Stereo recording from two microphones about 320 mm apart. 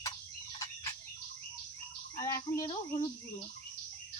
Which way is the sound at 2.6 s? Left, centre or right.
Centre.